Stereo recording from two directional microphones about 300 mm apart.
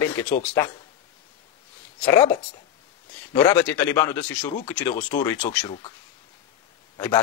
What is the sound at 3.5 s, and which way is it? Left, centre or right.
Speech, centre.